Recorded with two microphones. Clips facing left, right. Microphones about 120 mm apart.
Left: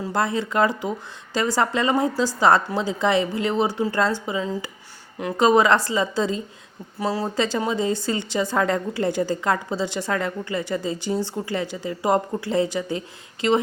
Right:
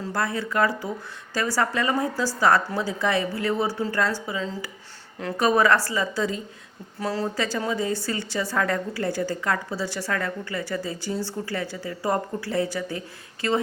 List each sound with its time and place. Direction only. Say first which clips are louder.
0.0 s a woman's voice: left 4 dB; 20° left (ahead or behind)
7.0 s speech: left 2 dB; 10° left (ahead or behind)
7.3 s a woman's voice: left 3 dB; 25° left (ahead or behind)